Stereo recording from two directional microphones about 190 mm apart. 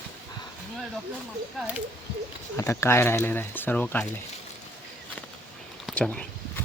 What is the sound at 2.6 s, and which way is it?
Speech, 15° left (ahead or behind).